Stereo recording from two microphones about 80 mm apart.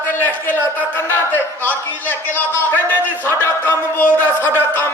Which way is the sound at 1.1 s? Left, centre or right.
Left.